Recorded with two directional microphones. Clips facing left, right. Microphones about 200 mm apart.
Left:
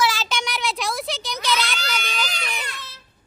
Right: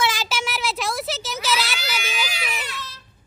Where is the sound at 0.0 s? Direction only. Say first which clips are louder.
Left 1 dB; 20° right (ahead or behind).